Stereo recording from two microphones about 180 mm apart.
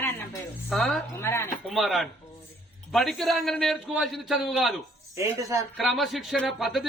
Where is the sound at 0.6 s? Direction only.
Centre (ahead or behind).